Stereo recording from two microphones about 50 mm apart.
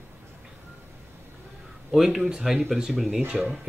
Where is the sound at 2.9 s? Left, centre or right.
Centre.